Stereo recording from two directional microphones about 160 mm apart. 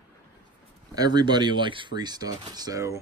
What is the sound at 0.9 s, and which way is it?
Speech, 25° right (ahead or behind).